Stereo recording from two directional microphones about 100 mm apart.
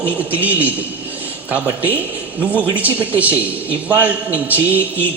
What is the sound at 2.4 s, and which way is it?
A man's voice, 15° right (ahead or behind).